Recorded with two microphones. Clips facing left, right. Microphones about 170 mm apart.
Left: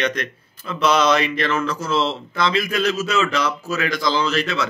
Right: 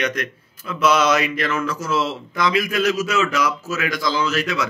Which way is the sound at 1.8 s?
30° left (ahead or behind).